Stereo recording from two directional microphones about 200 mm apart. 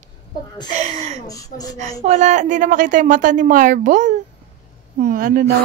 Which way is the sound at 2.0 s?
35° right (ahead or behind).